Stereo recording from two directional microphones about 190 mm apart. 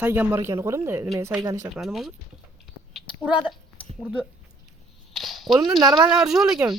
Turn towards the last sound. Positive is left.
turn(degrees=0)  # may be behind; listen again after turning